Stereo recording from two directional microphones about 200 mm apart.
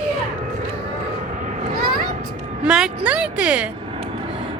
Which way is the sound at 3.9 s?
30° right (ahead or behind).